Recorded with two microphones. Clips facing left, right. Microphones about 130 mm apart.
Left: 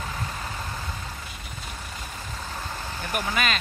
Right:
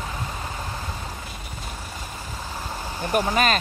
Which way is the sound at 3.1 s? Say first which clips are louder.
Right 6 dB; 35° right (ahead or behind).